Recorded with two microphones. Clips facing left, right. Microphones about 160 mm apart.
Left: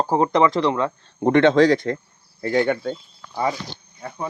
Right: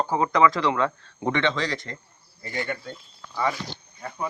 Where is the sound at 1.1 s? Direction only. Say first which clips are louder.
Left 11 dB; 45° left (ahead or behind).